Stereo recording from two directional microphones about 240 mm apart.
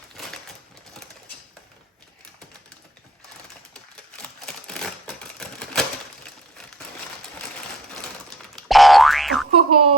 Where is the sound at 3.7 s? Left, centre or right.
Centre.